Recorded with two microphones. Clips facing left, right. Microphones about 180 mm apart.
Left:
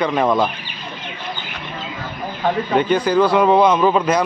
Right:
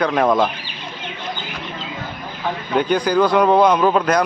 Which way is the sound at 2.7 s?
Centre (ahead or behind).